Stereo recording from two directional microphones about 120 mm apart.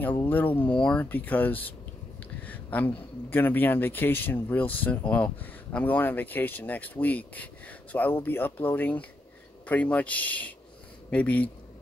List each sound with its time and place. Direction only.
0.0 s speech: 15° left (ahead or behind)